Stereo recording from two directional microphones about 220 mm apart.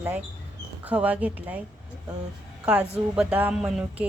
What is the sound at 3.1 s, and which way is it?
Speech, 5° right (ahead or behind).